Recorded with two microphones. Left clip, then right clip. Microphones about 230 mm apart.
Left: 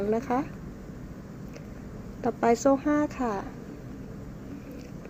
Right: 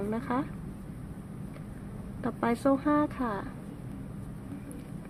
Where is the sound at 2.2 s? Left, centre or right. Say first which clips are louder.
Left 6 dB; centre.